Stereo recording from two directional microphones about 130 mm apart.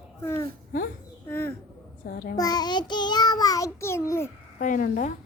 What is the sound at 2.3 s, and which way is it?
Child singing, 30° left (ahead or behind).